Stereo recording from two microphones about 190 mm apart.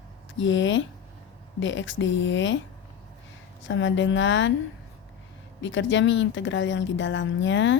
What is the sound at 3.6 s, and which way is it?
Speech, 80° left.